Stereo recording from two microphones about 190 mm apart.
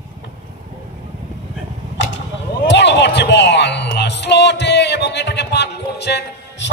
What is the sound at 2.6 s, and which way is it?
Speech, 65° left (ahead or behind).